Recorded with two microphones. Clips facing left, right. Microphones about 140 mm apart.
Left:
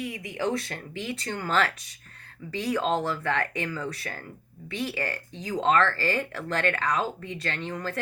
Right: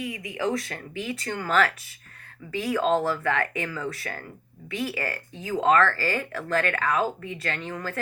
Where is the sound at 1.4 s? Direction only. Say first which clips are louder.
Right 3 dB; 25° left (ahead or behind).